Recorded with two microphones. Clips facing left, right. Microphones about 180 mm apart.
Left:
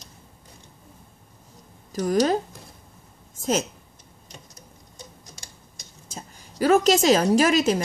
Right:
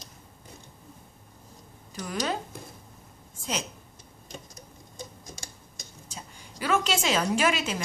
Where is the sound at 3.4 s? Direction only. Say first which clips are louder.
Left 9 dB; 45° left (ahead or behind).